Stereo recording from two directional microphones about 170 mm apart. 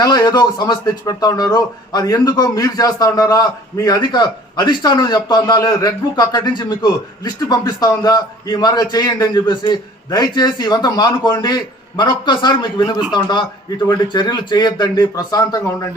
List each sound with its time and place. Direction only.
0.0 s a man's voice: 20° left (ahead or behind)